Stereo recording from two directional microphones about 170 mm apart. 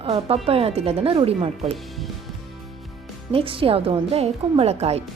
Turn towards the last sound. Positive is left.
turn(degrees=-40)  # may be behind; listen again after turning